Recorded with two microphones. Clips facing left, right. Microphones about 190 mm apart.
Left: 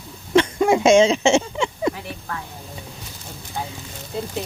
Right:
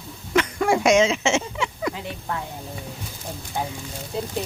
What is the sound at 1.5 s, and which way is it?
Speech, 30° left (ahead or behind).